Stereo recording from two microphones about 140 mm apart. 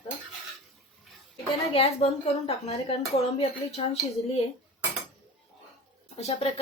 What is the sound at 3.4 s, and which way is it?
Speech, 50° left (ahead or behind).